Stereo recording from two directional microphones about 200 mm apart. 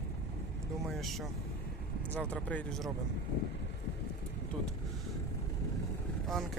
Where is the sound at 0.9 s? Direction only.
Centre (ahead or behind).